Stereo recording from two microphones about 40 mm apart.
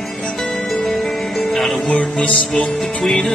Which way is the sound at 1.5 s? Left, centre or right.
Centre.